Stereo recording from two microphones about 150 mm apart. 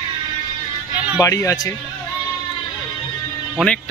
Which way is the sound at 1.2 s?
20° left (ahead or behind).